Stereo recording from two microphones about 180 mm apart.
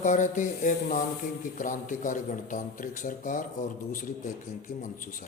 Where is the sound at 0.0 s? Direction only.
45° left (ahead or behind).